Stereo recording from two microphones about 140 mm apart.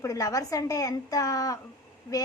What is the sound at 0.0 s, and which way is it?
A woman's voice, 25° left (ahead or behind).